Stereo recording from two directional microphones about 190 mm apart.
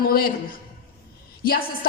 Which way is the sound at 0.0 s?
50° left (ahead or behind).